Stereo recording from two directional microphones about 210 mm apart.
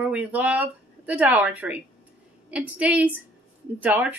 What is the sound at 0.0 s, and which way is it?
Speech, 5° right (ahead or behind).